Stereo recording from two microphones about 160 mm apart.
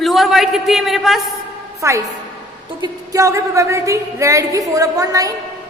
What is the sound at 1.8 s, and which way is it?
A woman's voice, 20° right (ahead or behind).